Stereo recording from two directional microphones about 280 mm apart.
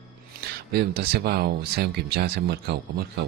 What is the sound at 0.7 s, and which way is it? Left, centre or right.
Speech, right.